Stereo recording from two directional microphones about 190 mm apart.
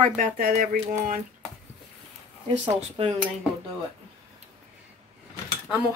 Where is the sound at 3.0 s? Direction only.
25° right (ahead or behind).